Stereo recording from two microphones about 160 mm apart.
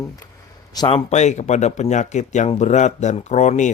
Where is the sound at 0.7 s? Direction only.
30° left (ahead or behind).